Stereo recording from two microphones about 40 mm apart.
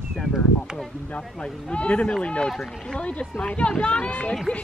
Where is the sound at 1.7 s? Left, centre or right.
Left.